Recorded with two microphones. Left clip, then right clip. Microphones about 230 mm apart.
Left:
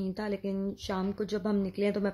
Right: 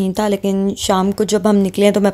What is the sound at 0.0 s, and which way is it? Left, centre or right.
Speech, right.